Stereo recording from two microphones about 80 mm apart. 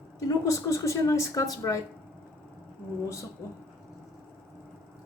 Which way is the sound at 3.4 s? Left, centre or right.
Left.